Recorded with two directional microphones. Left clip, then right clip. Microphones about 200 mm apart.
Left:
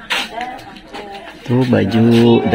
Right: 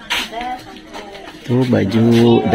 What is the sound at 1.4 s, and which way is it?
Speech, 15° left (ahead or behind).